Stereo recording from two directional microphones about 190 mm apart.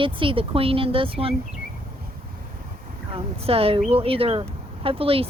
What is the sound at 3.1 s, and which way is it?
Speech, 30° right (ahead or behind).